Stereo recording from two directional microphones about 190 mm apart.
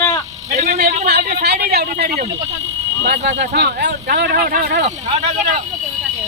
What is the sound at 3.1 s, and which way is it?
Speech, 40° right (ahead or behind).